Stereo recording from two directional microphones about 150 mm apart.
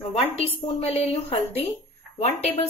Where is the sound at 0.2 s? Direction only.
40° left (ahead or behind).